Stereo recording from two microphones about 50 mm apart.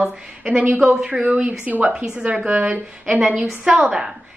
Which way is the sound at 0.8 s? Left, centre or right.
Centre.